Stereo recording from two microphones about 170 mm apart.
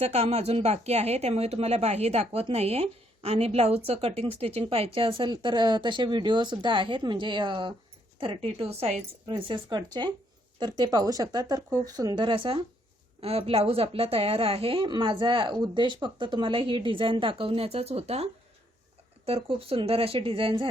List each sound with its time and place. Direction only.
0.0 s a woman's voice: 40° right (ahead or behind)